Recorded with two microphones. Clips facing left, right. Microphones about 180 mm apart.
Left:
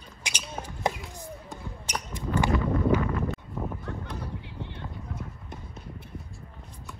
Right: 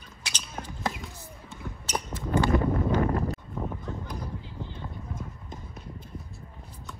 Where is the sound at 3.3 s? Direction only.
5° left (ahead or behind).